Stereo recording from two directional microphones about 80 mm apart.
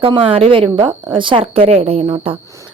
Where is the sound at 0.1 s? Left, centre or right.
Right.